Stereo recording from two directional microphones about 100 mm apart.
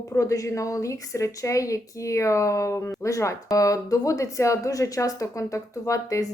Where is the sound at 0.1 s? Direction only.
30° left (ahead or behind).